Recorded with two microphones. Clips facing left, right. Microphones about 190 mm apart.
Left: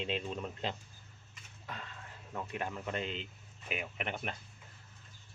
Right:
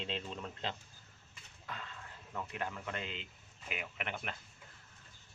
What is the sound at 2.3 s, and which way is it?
Speech, 15° left (ahead or behind).